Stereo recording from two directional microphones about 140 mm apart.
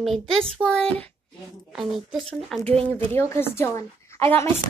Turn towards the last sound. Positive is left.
turn(degrees=20)  # may be behind; listen again after turning